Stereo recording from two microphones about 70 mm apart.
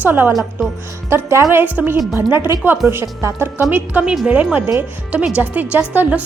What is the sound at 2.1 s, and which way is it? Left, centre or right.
A woman's voice, right.